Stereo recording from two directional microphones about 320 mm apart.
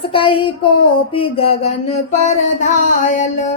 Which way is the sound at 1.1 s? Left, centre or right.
Centre.